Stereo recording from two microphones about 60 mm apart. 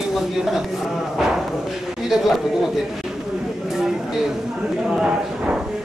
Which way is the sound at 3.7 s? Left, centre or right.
Centre.